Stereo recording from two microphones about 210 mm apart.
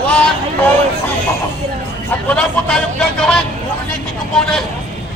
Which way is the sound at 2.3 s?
5° left (ahead or behind).